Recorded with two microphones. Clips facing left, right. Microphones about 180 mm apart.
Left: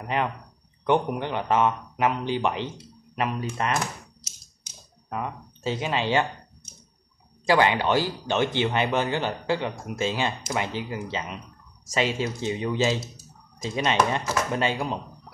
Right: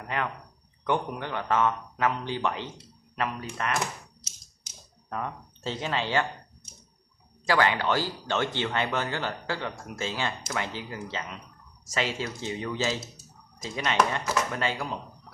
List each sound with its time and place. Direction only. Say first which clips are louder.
0.0 s speech: left 5 dB; 20° left (ahead or behind)
5.1 s speech: left 2 dB; 10° left (ahead or behind)
7.4 s speech: left 4 dB; 20° left (ahead or behind)